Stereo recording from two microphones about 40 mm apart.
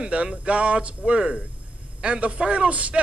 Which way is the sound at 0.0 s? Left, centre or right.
Right.